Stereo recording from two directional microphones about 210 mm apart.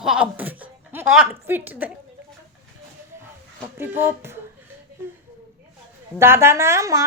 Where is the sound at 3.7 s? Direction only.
10° right (ahead or behind).